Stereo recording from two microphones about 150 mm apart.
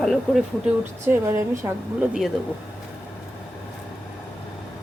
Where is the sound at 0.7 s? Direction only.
15° right (ahead or behind).